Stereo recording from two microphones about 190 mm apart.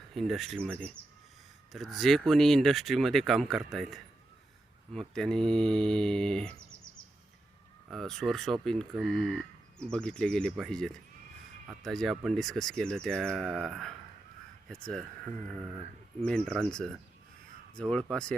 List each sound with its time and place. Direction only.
0.1 s speech: centre (ahead or behind)
1.7 s speech: centre (ahead or behind)
7.9 s speech: centre (ahead or behind)
16.2 s speech: 5° left (ahead or behind)